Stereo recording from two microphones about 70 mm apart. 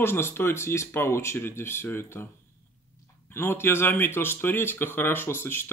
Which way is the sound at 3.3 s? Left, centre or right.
Left.